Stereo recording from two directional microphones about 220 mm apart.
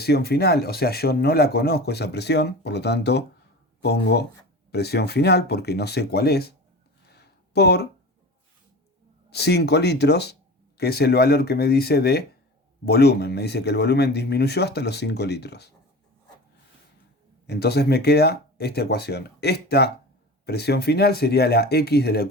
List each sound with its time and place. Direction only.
0.0 s speech: 45° left (ahead or behind)
7.0 s a sound: 50° left (ahead or behind)
9.3 s speech: 50° left (ahead or behind)
17.4 s speech: 45° left (ahead or behind)